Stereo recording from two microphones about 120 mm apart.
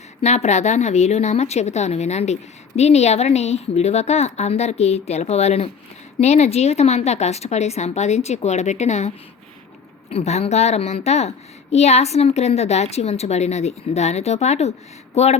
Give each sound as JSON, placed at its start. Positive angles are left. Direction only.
{"t": 0.2, "sound": "speech", "side_deg": 70}